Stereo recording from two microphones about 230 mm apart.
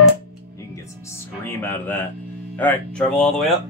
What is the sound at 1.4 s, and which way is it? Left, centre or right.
Music, centre.